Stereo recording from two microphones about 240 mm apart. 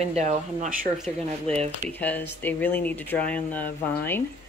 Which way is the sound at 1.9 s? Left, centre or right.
Centre.